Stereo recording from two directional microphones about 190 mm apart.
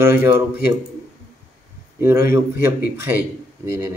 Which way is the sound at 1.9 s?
15° right (ahead or behind).